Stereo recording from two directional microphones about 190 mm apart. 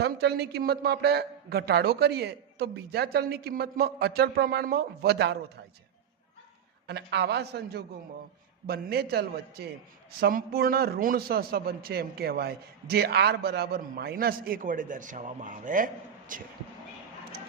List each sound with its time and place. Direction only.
0.0 s a man's voice: 60° right (ahead or behind)
6.8 s a man's voice: 60° right (ahead or behind); by 16.4 s 45° right (ahead or behind)